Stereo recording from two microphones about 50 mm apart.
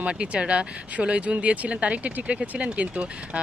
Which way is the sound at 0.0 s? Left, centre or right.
Right.